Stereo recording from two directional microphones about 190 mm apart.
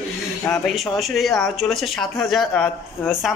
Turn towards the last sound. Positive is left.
turn(degrees=0)  # may be behind; listen again after turning